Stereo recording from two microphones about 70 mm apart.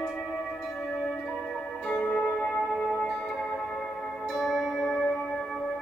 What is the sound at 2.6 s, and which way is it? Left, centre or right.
Singing bowl, centre.